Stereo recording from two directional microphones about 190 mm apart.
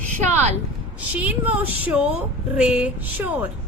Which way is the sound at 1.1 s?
10° right (ahead or behind).